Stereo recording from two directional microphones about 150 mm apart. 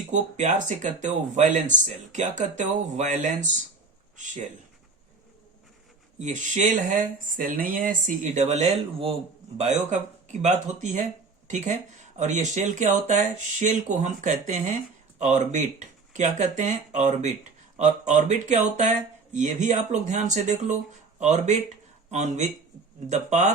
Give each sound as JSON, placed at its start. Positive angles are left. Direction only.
{"t": 0.1, "sound": "speech", "side_deg": -55}
{"t": 6.1, "sound": "speech", "side_deg": -55}
{"t": 9.6, "sound": "speech", "side_deg": -50}